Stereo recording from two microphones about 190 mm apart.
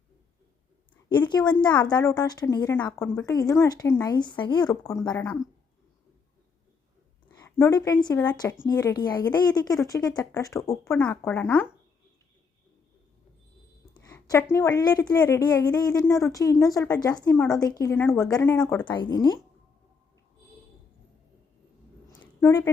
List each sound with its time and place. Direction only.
1.1 s speech: 25° left (ahead or behind)
7.3 s a woman's voice: 20° left (ahead or behind)
13.9 s a sound: 20° left (ahead or behind)
14.5 s speech: 15° left (ahead or behind)
18.9 s speech: 20° left (ahead or behind)
22.2 s a sound: 15° left (ahead or behind)